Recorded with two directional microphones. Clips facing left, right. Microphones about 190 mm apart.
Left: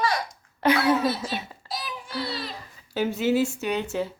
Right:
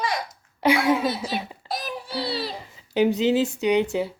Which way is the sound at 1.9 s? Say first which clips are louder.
Right 3 dB; 30° right (ahead or behind).